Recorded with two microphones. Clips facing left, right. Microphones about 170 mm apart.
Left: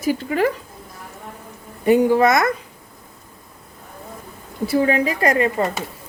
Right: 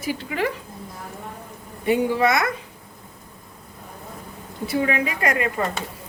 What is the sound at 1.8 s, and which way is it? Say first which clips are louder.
Speech: left 5 dB; 45° left (ahead or behind).